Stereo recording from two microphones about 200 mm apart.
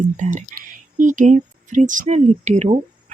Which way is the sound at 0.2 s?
40° right (ahead or behind).